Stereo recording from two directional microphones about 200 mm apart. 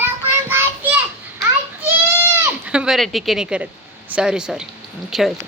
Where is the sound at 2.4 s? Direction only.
5° right (ahead or behind).